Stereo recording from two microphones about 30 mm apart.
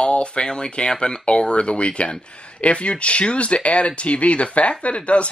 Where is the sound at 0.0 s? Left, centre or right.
Left.